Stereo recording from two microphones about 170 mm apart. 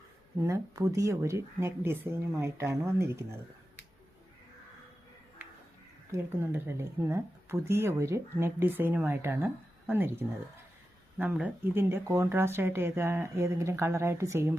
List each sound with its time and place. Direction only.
0.4 s speech: 20° right (ahead or behind)
6.1 s speech: 15° right (ahead or behind)